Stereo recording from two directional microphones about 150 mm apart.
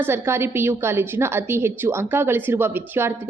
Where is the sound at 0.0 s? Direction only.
15° right (ahead or behind).